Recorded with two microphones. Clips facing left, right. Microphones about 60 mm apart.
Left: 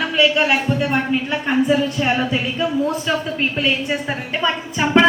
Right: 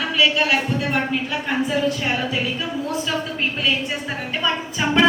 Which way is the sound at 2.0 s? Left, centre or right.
Left.